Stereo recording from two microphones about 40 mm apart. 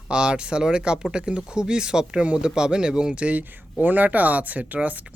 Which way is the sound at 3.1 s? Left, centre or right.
Right.